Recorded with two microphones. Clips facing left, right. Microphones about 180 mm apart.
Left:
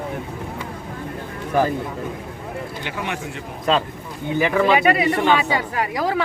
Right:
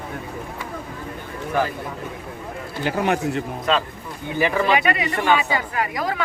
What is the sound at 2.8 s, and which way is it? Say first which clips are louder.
Speech: right 10 dB; 40° right (ahead or behind).